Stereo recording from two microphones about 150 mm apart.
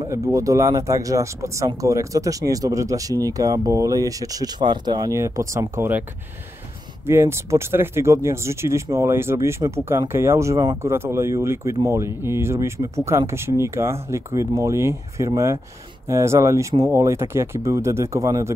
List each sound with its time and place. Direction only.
0.1 s speech: 20° right (ahead or behind)
7.1 s speech: 15° right (ahead or behind)